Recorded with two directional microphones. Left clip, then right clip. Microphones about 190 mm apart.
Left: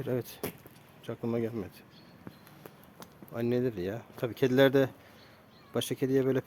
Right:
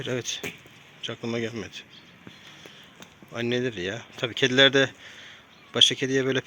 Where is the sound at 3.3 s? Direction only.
5° left (ahead or behind).